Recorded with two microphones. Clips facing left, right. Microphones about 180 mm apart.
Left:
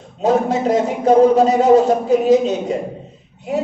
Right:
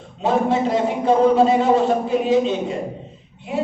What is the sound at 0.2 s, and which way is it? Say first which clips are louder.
A man's voice: left 2 dB; 40° left (ahead or behind).